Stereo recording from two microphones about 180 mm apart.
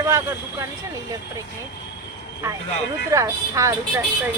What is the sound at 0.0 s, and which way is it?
Speech, 15° right (ahead or behind).